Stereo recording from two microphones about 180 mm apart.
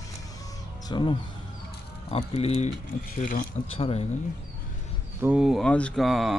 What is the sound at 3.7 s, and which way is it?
Speech, 35° left (ahead or behind).